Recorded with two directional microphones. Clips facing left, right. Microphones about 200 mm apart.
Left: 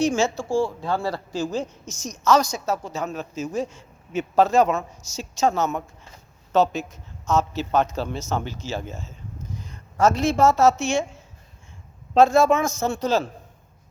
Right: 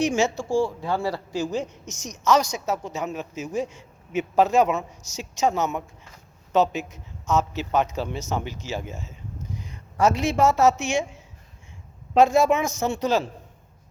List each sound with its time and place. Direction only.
0.0 s a man's voice: 20° right (ahead or behind)
12.1 s a man's voice: 15° right (ahead or behind)